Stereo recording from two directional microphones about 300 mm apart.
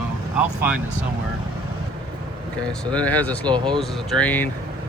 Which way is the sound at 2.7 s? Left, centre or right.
Centre.